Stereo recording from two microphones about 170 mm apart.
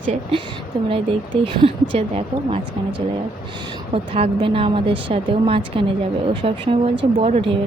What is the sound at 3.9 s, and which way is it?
Speech, 35° right (ahead or behind).